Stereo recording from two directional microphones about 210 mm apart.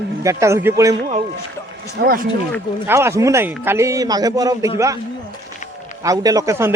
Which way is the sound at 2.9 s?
15° right (ahead or behind).